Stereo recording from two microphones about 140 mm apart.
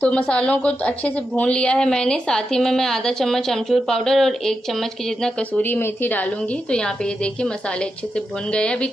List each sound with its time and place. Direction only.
0.0 s a woman's voice: 10° left (ahead or behind)